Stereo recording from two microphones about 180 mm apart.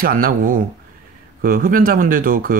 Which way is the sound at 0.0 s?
50° right (ahead or behind).